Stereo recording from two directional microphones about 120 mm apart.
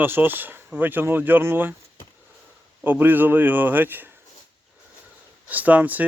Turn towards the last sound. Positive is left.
turn(degrees=-15)  # may be behind; listen again after turning